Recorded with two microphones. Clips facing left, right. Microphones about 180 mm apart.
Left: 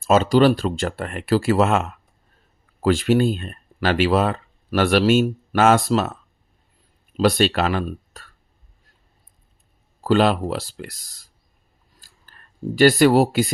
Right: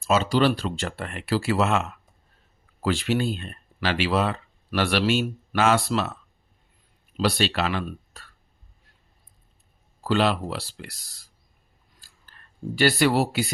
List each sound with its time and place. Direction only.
0.0 s speech: 45° left (ahead or behind)
7.2 s speech: 50° left (ahead or behind)
10.0 s speech: 45° left (ahead or behind)
11.9 s a sound: 45° left (ahead or behind)